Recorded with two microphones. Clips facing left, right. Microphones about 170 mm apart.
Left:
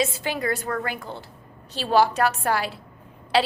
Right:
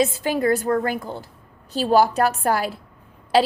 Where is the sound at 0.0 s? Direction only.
40° right (ahead or behind).